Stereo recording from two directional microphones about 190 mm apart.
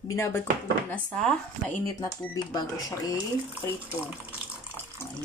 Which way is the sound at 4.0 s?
10° right (ahead or behind).